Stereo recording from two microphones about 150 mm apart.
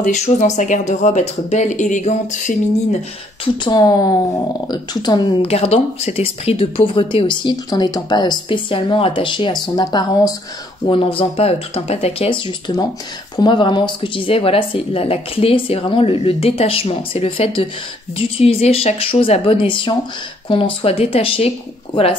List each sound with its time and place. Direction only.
0.0 s speech: 55° left (ahead or behind)
3.6 s speech: 25° left (ahead or behind)
10.9 s speech: 35° left (ahead or behind)